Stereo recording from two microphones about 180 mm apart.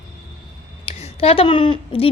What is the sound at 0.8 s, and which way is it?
Speech, 35° left (ahead or behind).